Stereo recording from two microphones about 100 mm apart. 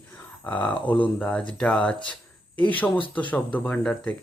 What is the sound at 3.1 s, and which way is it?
Speech, 15° left (ahead or behind).